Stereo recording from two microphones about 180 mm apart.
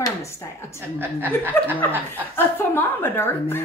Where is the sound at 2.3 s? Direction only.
10° left (ahead or behind).